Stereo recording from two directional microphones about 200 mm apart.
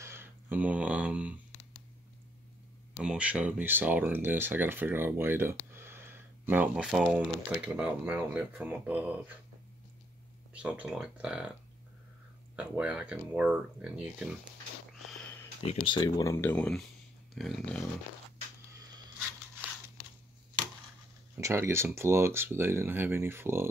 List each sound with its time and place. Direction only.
0.0 s speech: 10° right (ahead or behind)
3.0 s speech: 5° right (ahead or behind)
10.5 s speech: 5° right (ahead or behind)
12.5 s speech: 5° right (ahead or behind)
15.6 s speech: 30° left (ahead or behind)
16.0 s speech: 15° left (ahead or behind)
17.3 s dog: centre (ahead or behind)
21.4 s speech: 15° right (ahead or behind)